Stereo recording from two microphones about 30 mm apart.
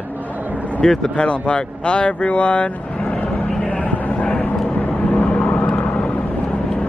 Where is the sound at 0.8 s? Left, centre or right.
Left.